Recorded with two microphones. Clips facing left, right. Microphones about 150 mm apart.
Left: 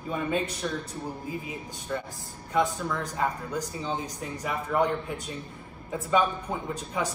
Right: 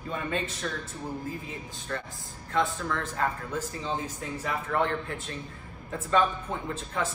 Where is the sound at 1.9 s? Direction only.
10° left (ahead or behind).